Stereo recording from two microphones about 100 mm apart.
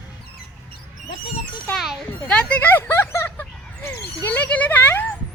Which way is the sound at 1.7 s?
5° right (ahead or behind).